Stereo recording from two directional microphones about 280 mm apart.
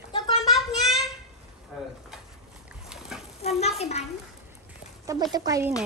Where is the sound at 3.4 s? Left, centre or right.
Left.